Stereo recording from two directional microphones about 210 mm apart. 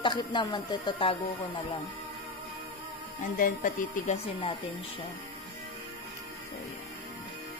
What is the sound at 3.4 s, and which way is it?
Speech, 40° left (ahead or behind).